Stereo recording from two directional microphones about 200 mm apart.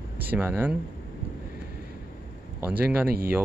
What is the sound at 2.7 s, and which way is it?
Speech, 10° right (ahead or behind).